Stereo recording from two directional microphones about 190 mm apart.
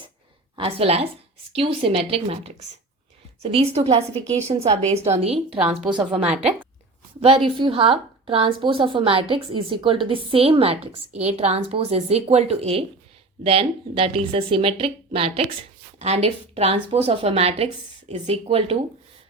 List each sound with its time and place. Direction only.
0.5 s a woman's voice: 30° right (ahead or behind)
3.5 s a woman's voice: 30° right (ahead or behind)
5.5 s a woman's voice: 5° right (ahead or behind)
6.2 s a woman's voice: 35° right (ahead or behind)